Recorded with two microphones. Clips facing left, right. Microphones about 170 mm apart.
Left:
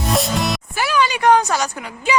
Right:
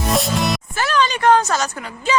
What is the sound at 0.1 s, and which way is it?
Music, centre (ahead or behind).